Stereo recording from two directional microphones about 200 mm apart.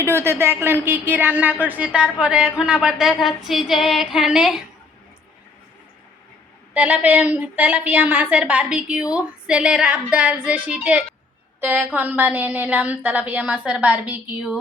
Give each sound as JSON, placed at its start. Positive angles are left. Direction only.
{"t": 0.0, "sound": "a woman's voice", "side_deg": -10}
{"t": 2.2, "sound": "a sound", "side_deg": -5}
{"t": 6.7, "sound": "a woman's voice", "side_deg": -5}